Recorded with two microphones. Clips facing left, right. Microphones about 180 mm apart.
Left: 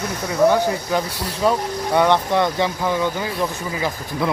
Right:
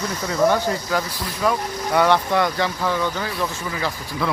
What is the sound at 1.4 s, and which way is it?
Speech, 25° left (ahead or behind).